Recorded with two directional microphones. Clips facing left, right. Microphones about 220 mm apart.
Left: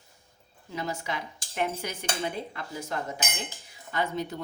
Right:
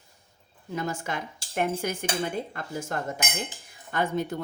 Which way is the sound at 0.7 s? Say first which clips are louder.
Right 2 dB; 50° right (ahead or behind).